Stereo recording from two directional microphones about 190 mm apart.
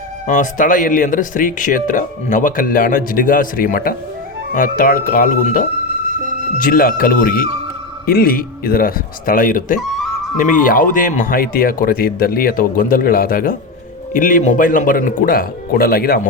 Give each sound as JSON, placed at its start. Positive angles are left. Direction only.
{"t": 0.3, "sound": "speech", "side_deg": 45}